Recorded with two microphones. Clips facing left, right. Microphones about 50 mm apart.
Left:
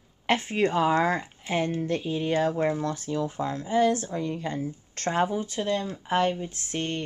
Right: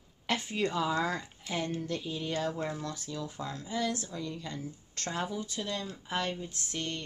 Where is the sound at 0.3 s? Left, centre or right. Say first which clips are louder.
Left 7 dB; left.